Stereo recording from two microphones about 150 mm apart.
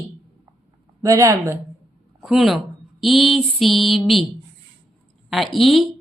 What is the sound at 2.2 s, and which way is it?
A woman's voice, centre (ahead or behind).